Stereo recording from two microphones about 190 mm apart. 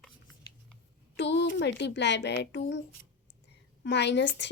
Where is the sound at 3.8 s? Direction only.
65° left (ahead or behind).